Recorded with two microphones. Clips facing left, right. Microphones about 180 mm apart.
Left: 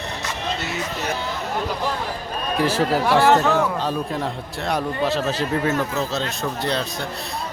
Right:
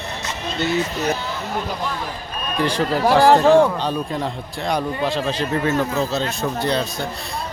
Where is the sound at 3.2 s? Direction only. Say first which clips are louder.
Right 8 dB; 35° right (ahead or behind).